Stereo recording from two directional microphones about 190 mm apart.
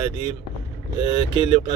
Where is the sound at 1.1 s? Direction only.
30° right (ahead or behind).